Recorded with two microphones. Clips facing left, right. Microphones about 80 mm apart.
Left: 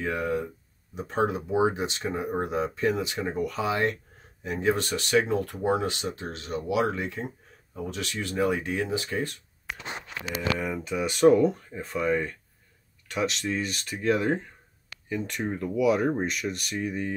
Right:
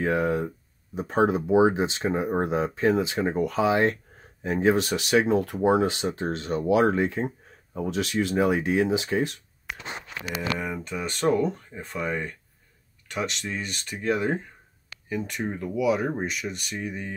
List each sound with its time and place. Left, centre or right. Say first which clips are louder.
0.0 s speech: right 4 dB; right
4.7 s speech: right 2 dB; centre
6.0 s speech: right 6 dB; right
7.9 s speech: right 8 dB; centre
10.6 s speech: left 2 dB; centre